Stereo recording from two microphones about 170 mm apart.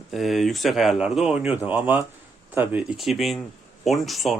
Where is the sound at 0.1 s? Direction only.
Centre (ahead or behind).